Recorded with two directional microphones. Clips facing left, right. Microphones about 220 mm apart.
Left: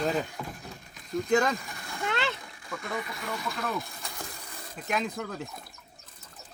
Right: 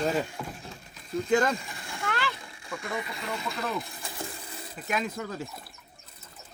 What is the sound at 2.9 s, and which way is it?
Speech, 25° right (ahead or behind).